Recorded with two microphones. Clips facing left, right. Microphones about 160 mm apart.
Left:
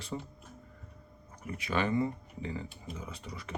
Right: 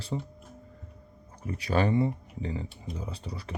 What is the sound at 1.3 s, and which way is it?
Speech, 30° right (ahead or behind).